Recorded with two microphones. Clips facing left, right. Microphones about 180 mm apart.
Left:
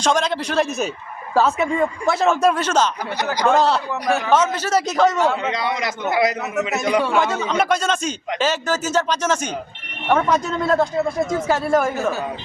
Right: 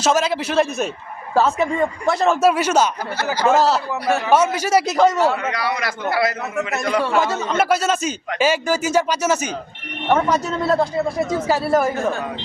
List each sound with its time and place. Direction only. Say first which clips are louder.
0.0 s a man's voice: right 1 dB; 5° right (ahead or behind)
5.4 s a man's voice: even; 20° left (ahead or behind)
7.0 s a man's voice: even; centre (ahead or behind)